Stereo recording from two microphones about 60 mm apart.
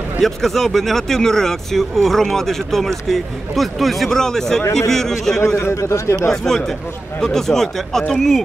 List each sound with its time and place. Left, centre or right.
0.2 s speech: centre
5.6 s a man's voice: left
6.3 s speech: centre